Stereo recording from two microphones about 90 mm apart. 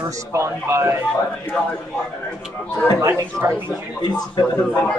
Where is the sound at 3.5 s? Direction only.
50° left (ahead or behind).